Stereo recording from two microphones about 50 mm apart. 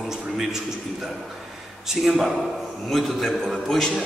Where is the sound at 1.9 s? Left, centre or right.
Centre.